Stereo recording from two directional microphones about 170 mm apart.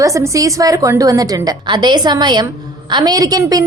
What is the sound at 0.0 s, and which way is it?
A woman's voice, 20° right (ahead or behind).